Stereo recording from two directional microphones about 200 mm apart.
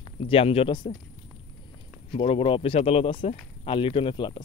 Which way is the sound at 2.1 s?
30° left (ahead or behind).